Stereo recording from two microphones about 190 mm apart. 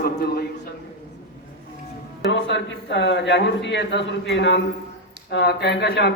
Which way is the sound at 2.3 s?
65° left (ahead or behind).